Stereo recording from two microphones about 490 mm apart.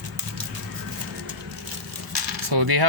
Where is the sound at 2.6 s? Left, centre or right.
Right.